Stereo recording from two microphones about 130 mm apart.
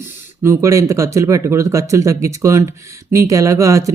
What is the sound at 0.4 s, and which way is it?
Speech, 20° right (ahead or behind).